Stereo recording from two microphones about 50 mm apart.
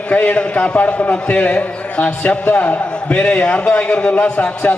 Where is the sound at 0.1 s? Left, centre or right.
Left.